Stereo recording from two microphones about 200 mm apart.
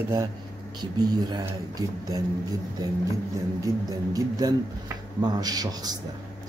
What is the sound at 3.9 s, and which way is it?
Speech, 20° right (ahead or behind).